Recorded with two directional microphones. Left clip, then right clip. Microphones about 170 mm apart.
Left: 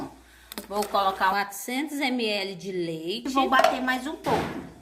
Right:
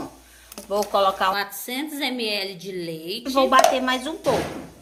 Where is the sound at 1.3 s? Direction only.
35° left (ahead or behind).